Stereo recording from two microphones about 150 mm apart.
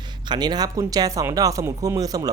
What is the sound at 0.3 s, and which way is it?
Speech, 30° right (ahead or behind).